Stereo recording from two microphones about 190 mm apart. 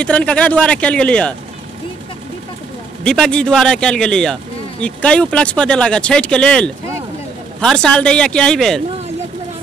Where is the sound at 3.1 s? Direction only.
5° left (ahead or behind).